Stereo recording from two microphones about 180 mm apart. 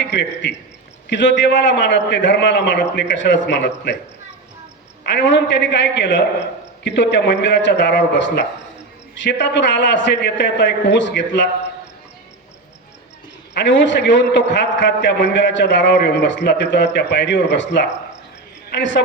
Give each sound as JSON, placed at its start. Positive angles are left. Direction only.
{"t": 0.0, "sound": "a man's voice", "side_deg": 80}
{"t": 5.0, "sound": "a man's voice", "side_deg": 80}
{"t": 13.5, "sound": "a man's voice", "side_deg": 80}